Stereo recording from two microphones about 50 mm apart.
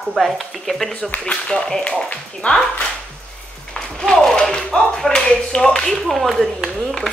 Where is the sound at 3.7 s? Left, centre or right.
Centre.